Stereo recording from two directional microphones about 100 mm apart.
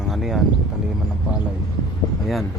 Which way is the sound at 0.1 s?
Centre (ahead or behind).